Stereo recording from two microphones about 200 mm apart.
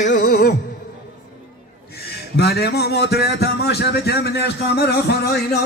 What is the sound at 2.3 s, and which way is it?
Speech, 55° left (ahead or behind).